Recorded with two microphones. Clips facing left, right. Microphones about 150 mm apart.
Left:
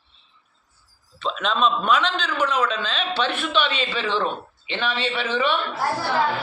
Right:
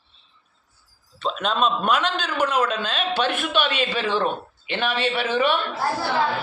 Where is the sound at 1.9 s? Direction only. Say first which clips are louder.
Left 1 dB; 45° right (ahead or behind).